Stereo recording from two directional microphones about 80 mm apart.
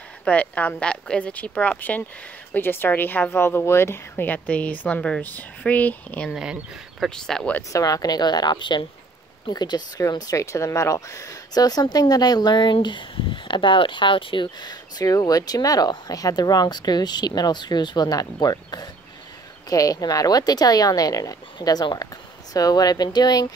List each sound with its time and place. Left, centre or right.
0.2 s speech: centre
6.3 s speech: centre
7.2 s speech: centre
7.7 s speech: left
9.5 s speech: left
10.0 s speech: left
21.5 s speech: left